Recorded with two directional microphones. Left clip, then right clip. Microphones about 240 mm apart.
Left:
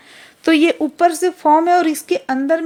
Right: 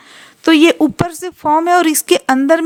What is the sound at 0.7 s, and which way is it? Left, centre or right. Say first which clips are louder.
A woman's voice: left 1 dB; right.